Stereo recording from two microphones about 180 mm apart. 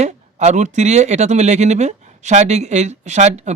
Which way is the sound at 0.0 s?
40° right (ahead or behind).